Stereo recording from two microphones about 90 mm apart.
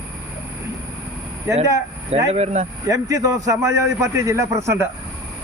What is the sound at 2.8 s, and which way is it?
A man's voice, 40° right (ahead or behind).